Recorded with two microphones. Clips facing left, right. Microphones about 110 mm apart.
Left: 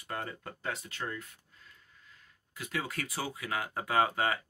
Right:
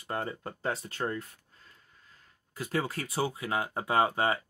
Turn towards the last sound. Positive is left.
turn(degrees=-30)  # may be behind; listen again after turning